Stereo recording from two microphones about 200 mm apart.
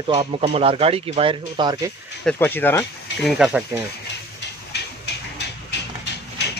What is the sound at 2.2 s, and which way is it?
Speech, 10° left (ahead or behind).